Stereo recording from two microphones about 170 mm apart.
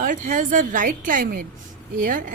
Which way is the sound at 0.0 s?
50° right (ahead or behind).